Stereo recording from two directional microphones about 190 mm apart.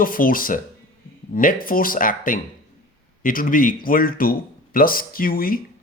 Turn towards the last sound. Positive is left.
turn(degrees=50)  # may be behind; listen again after turning